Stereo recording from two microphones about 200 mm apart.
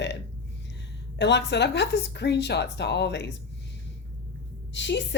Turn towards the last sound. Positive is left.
turn(degrees=60)  # may be behind; listen again after turning